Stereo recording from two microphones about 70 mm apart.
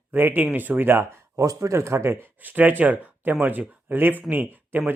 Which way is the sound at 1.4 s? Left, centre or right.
Right.